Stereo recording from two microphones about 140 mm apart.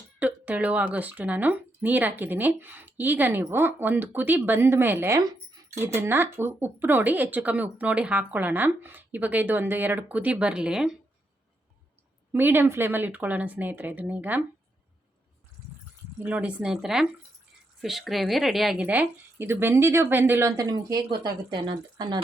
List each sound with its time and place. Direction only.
0.2 s speech: 10° right (ahead or behind)
12.3 s speech: 15° right (ahead or behind)
16.1 s speech: 10° right (ahead or behind)
20.6 s speech: 25° right (ahead or behind)